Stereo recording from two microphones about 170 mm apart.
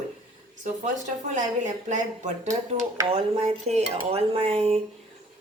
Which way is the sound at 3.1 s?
40° right (ahead or behind).